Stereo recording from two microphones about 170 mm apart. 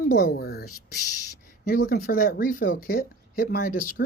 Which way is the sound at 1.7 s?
60° left (ahead or behind).